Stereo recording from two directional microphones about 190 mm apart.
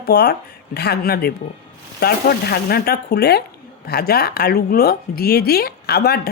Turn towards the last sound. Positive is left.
turn(degrees=55)  # may be behind; listen again after turning